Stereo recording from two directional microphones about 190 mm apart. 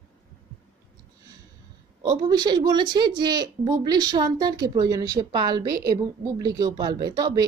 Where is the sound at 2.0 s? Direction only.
20° right (ahead or behind).